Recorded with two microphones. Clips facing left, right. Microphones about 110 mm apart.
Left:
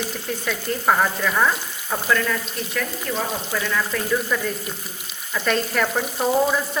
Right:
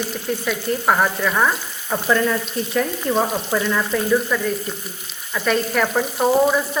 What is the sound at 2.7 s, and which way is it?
Speech, 25° right (ahead or behind).